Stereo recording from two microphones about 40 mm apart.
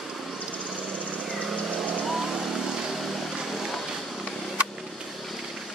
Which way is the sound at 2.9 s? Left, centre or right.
Centre.